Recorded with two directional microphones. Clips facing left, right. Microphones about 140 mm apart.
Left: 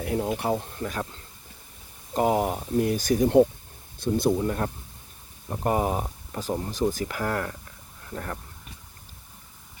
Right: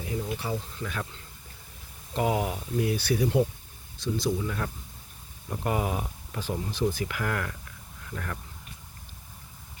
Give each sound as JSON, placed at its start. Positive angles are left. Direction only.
{"t": 0.0, "sound": "speech", "side_deg": 65}
{"t": 2.1, "sound": "speech", "side_deg": 45}